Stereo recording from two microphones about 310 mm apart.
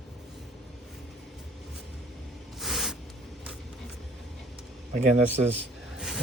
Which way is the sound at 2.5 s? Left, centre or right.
Centre.